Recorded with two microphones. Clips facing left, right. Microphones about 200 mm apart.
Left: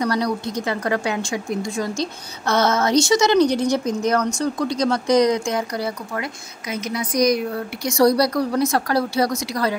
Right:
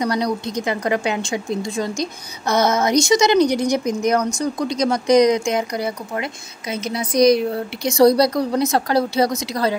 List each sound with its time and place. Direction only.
0.0 s a woman's voice: 20° right (ahead or behind)